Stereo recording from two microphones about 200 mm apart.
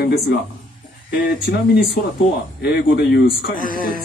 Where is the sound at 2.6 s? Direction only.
55° left (ahead or behind).